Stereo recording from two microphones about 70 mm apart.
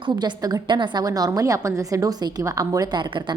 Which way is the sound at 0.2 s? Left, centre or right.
Right.